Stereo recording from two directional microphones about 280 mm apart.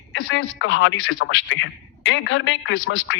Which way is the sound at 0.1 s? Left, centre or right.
Left.